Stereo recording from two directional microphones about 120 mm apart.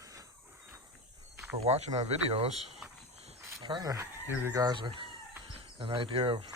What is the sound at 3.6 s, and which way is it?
Speech, 35° right (ahead or behind).